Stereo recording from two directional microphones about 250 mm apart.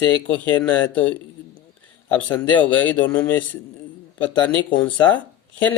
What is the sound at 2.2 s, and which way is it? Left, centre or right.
Speech, centre.